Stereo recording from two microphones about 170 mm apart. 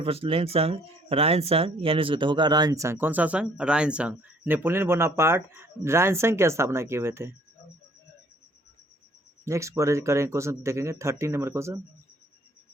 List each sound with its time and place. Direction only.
0.0 s speech: 35° right (ahead or behind); by 7.3 s 15° right (ahead or behind)
9.4 s speech: 15° right (ahead or behind)